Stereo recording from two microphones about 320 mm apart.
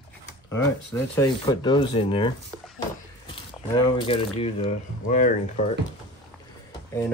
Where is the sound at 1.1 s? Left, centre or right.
Centre.